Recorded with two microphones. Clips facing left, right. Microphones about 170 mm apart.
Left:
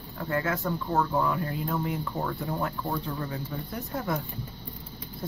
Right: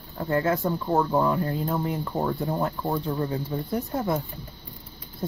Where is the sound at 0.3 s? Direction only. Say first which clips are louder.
Right 5 dB; 30° right (ahead or behind).